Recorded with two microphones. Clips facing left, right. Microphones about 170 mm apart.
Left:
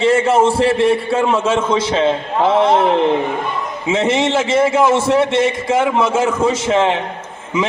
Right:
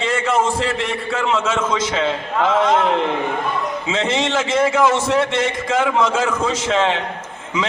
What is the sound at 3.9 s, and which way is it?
A man's voice, 25° left (ahead or behind).